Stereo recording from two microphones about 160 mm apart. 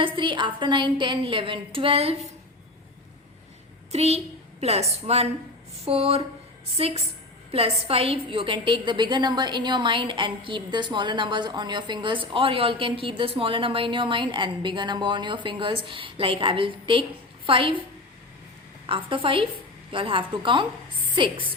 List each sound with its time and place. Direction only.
0.0 s a woman's voice: 30° right (ahead or behind)
3.9 s a woman's voice: 40° right (ahead or behind)
18.9 s a woman's voice: 30° right (ahead or behind)